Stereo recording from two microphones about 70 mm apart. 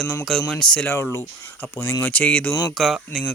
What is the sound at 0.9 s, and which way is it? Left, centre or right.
Speech, left.